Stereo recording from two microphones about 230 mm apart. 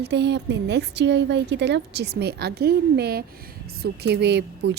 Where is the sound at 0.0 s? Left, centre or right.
Right.